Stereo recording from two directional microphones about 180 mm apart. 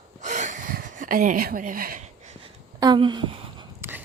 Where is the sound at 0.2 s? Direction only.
40° right (ahead or behind).